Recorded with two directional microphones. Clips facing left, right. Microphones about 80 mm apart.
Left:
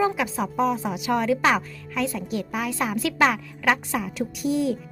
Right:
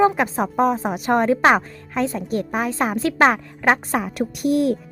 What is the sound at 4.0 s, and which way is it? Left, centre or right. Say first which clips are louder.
Speech: right 4 dB; right.